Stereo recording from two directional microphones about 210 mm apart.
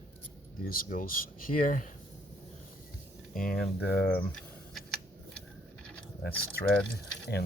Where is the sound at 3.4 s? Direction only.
45° left (ahead or behind).